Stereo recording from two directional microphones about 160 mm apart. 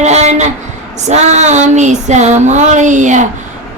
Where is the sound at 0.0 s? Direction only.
45° right (ahead or behind).